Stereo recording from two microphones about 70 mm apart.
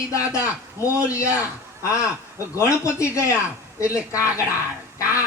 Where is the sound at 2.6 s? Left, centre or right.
Left.